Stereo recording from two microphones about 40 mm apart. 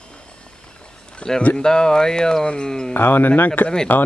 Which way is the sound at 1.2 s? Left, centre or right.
Left.